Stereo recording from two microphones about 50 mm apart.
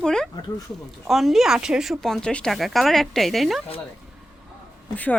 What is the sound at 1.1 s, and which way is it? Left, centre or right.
Speech, centre.